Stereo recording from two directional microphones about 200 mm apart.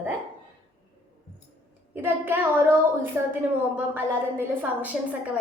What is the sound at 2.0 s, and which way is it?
A woman's voice, 10° right (ahead or behind).